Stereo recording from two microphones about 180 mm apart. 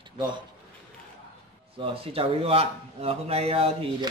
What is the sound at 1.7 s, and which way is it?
A man's voice, 30° right (ahead or behind).